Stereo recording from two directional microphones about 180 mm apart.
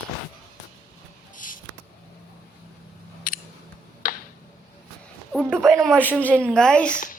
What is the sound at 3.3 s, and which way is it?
Camera, 50° left (ahead or behind).